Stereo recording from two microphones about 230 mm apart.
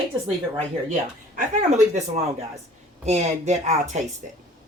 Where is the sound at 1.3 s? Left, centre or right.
Right.